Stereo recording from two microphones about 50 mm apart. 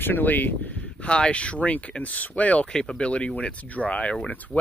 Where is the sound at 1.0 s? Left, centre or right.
Left.